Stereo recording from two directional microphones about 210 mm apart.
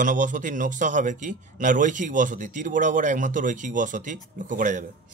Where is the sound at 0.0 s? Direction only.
40° right (ahead or behind).